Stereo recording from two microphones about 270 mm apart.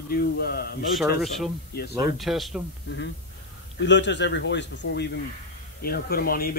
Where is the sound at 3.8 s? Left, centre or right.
Left.